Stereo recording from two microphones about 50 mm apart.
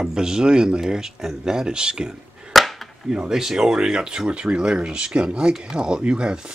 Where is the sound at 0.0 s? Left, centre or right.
Centre.